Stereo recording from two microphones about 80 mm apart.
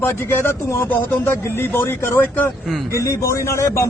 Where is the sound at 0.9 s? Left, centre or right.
Left.